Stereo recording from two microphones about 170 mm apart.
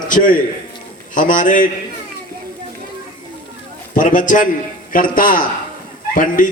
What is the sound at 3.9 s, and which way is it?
A man's voice, 50° left (ahead or behind).